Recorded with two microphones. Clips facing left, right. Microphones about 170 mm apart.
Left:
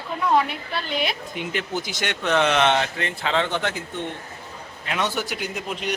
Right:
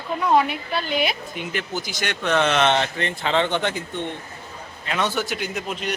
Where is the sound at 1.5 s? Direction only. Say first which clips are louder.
Even; 25° left (ahead or behind); by 3.8 s centre (ahead or behind).